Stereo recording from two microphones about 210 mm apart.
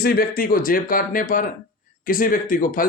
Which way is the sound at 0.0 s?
45° left (ahead or behind).